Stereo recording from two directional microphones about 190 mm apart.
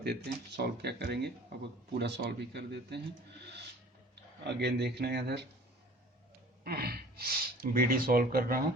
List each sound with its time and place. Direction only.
0.0 s speech: 60° right (ahead or behind)
4.1 s speech: 65° right (ahead or behind)
6.7 s speech: 55° right (ahead or behind)